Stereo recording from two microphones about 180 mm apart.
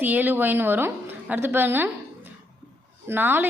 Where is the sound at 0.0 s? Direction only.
10° right (ahead or behind).